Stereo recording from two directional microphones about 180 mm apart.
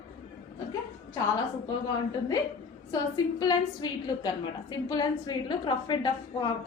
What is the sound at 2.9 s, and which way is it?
A woman's voice, 20° left (ahead or behind).